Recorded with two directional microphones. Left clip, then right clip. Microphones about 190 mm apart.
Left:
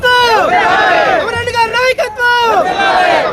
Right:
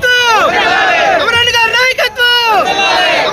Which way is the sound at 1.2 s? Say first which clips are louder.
Right 4 dB; 30° left (ahead or behind).